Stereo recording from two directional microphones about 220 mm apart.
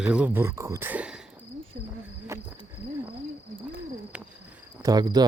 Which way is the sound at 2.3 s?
10° right (ahead or behind).